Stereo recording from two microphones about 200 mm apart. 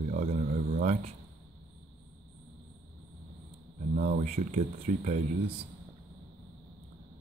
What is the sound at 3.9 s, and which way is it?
Speech, 40° right (ahead or behind).